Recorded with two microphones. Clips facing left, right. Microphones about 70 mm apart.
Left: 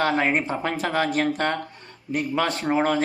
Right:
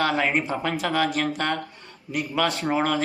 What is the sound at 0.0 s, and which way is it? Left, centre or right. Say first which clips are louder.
Speech: left 1 dB; left.